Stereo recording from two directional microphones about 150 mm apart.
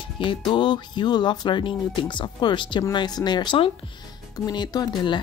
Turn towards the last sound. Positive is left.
turn(degrees=30)  # may be behind; listen again after turning